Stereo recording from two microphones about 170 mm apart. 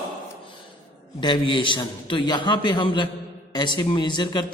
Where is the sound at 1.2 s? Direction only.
30° left (ahead or behind).